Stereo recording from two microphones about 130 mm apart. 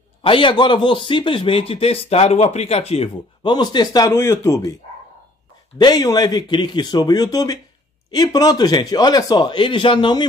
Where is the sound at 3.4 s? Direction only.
35° left (ahead or behind).